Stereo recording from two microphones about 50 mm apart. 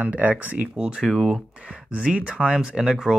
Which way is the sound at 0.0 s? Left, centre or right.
Right.